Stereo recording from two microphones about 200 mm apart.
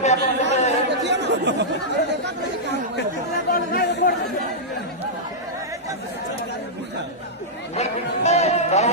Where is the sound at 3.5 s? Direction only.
50° left (ahead or behind).